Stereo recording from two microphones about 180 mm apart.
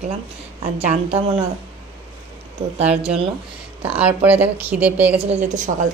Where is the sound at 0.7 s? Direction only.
35° right (ahead or behind).